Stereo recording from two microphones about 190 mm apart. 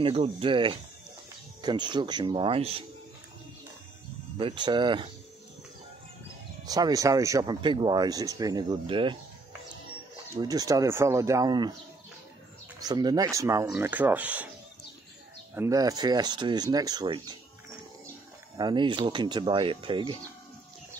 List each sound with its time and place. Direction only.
0.0 s speech: 30° right (ahead or behind)
4.4 s speech: 25° right (ahead or behind)
6.6 s speech: 20° right (ahead or behind)
10.3 s speech: 20° right (ahead or behind)
12.8 s speech: 20° right (ahead or behind)
15.5 s speech: 15° right (ahead or behind)
18.6 s speech: 25° right (ahead or behind)